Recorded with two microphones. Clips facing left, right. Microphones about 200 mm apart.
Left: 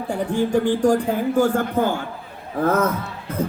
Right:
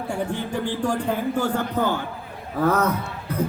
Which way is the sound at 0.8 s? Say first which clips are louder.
Left 5 dB; 45° left (ahead or behind).